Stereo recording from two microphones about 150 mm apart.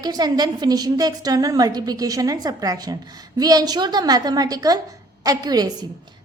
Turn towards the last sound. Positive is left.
turn(degrees=-25)  # may be behind; listen again after turning